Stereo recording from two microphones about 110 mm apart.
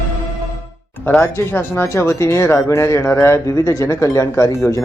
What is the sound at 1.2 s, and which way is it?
Speech, 20° left (ahead or behind).